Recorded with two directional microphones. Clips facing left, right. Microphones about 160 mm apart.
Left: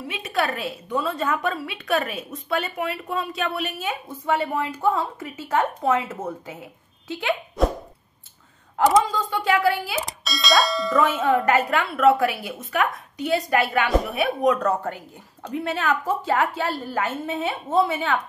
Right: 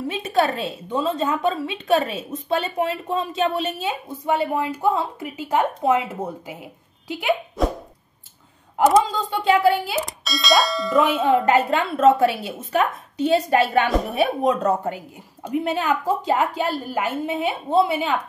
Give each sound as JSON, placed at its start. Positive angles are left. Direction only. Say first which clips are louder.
{"t": 0.1, "sound": "a woman's voice", "louder": "right 4 dB", "side_deg": -30}
{"t": 7.6, "sound": "plop", "louder": "left 4 dB", "side_deg": 0}
{"t": 9.1, "sound": "a woman's voice", "louder": "right 3 dB", "side_deg": -20}
{"t": 9.9, "sound": "speech", "louder": "right 3 dB", "side_deg": 0}
{"t": 11.0, "sound": "a woman's voice", "louder": "right 3 dB", "side_deg": -20}
{"t": 14.4, "sound": "a woman's voice", "louder": "right 1 dB", "side_deg": -20}